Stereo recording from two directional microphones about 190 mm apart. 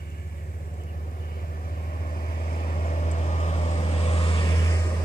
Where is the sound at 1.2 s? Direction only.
50° left (ahead or behind); by 4.4 s 30° left (ahead or behind).